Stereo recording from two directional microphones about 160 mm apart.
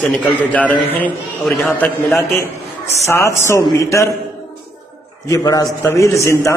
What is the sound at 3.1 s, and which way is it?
A man's voice, 15° left (ahead or behind).